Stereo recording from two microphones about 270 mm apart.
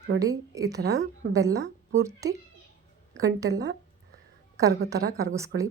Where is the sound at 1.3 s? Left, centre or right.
Centre.